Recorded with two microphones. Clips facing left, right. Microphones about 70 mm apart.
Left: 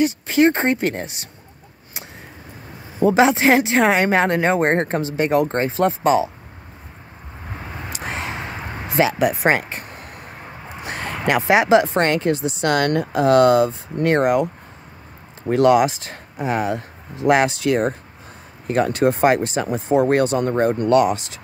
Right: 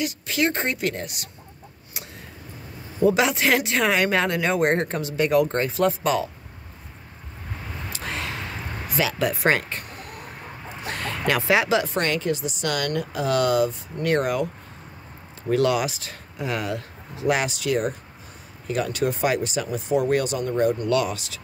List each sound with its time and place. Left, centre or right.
0.0 s speech: left
3.0 s speech: left
7.9 s a sound: left
10.8 s speech: centre; by 20.9 s left
20.9 s speech: left